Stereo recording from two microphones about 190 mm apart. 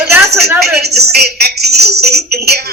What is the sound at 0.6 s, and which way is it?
Speech, 60° right (ahead or behind).